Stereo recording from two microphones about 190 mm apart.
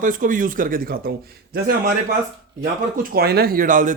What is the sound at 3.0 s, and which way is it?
Speech, 55° right (ahead or behind).